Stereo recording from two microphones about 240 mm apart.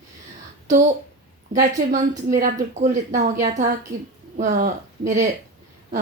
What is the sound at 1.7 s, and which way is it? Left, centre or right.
A woman's voice, right.